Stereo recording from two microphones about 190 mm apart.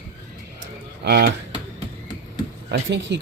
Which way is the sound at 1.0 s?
55° right (ahead or behind).